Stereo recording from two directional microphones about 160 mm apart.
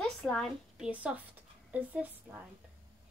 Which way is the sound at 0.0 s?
5° left (ahead or behind).